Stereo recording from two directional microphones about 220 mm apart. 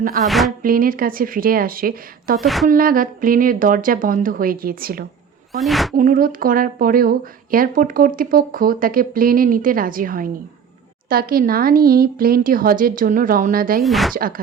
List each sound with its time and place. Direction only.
0.3 s speech: centre (ahead or behind)
0.6 s speech: 40° right (ahead or behind)
2.4 s speech: centre (ahead or behind)
2.6 s speech: 40° right (ahead or behind)
5.5 s speech: centre (ahead or behind)
6.0 s speech: 40° right (ahead or behind)
13.8 s speech: centre (ahead or behind)
14.2 s speech: 40° right (ahead or behind)